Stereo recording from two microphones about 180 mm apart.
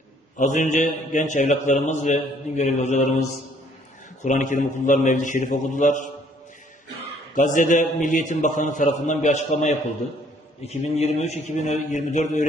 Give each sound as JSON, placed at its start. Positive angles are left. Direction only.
{"t": 0.3, "sound": "a man's voice", "side_deg": 45}
{"t": 7.3, "sound": "a man's voice", "side_deg": 45}